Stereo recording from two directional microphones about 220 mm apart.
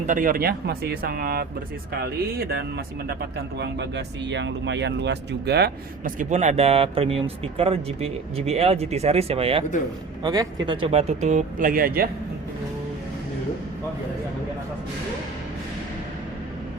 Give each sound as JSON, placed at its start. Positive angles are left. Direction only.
{"t": 0.0, "sound": "speech", "side_deg": -35}